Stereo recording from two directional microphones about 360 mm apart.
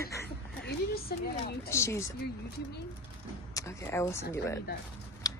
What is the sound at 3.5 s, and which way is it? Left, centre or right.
Speech, centre.